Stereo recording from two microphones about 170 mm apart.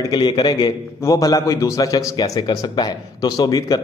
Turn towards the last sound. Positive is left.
turn(degrees=25)  # may be behind; listen again after turning